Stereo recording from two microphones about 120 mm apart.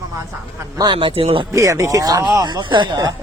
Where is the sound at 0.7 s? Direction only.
40° right (ahead or behind).